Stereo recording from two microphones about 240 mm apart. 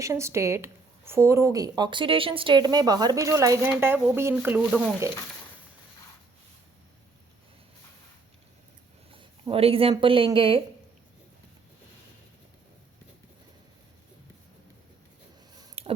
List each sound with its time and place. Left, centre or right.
0.0 s speech: centre
9.1 s speech: right
15.5 s a sound: right